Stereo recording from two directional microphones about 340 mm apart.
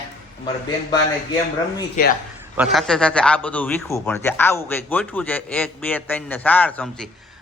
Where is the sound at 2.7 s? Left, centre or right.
Centre.